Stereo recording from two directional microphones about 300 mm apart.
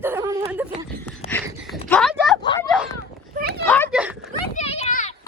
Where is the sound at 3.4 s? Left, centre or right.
Right.